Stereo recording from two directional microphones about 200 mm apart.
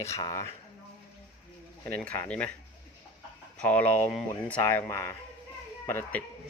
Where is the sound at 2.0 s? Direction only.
10° left (ahead or behind).